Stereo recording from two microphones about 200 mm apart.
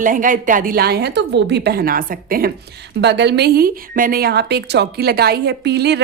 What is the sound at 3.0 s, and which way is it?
A woman's voice, 60° right (ahead or behind).